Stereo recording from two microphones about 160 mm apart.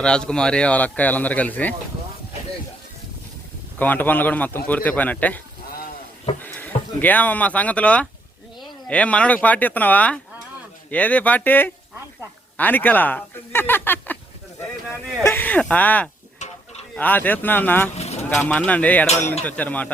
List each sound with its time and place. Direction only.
0.0 s speech: 5° left (ahead or behind)
3.8 s speech: 10° left (ahead or behind)
6.4 s speech: 10° left (ahead or behind)
15.2 s speech: 15° left (ahead or behind)
16.4 s livestock: 45° left (ahead or behind)
16.9 s speech: 10° left (ahead or behind)
17.9 s a sound: 40° left (ahead or behind)
18.3 s speech: 10° left (ahead or behind)